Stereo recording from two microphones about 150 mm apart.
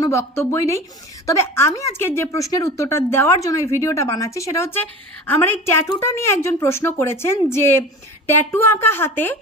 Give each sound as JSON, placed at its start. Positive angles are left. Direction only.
{"t": 0.0, "sound": "a woman's voice", "side_deg": 20}